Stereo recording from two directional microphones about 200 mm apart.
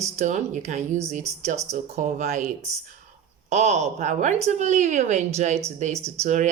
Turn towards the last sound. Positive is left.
turn(degrees=-35)  # may be behind; listen again after turning